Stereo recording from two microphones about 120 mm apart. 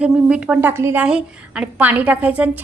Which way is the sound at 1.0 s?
10° right (ahead or behind).